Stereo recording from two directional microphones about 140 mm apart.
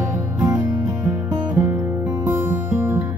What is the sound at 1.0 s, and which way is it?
Music, 20° right (ahead or behind).